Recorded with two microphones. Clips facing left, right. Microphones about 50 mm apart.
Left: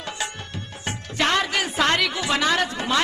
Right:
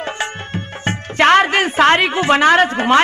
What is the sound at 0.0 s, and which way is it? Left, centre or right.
Speech, right.